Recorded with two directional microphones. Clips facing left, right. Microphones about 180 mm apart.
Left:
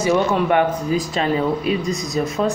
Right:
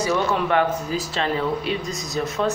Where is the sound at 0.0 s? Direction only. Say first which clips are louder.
Left 4 dB; 15° left (ahead or behind).